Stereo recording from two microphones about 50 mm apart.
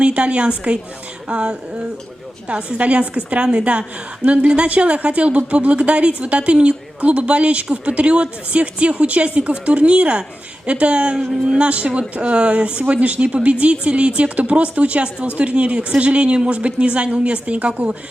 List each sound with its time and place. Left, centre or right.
0.0 s a woman's voice: right